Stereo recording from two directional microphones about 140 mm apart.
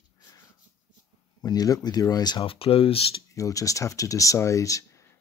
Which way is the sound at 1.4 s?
25° left (ahead or behind).